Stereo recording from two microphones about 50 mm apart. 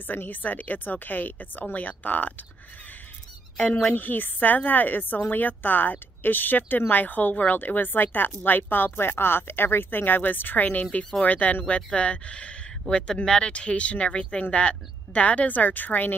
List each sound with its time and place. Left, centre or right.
0.0 s a woman's voice: left
3.9 s a woman's voice: left
12.8 s speech: centre
13.5 s a woman's voice: left